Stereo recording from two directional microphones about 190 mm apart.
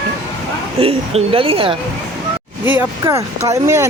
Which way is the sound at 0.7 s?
30° right (ahead or behind).